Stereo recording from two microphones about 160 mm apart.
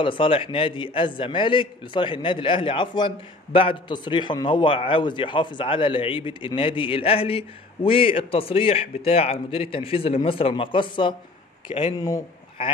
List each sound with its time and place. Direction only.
0.0 s a man's voice: 30° left (ahead or behind)